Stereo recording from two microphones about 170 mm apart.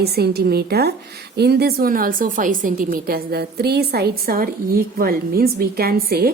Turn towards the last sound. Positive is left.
turn(degrees=-65)  # may be behind; listen again after turning